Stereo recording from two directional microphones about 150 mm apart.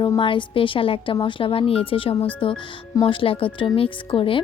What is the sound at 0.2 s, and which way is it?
A woman's voice, 35° left (ahead or behind).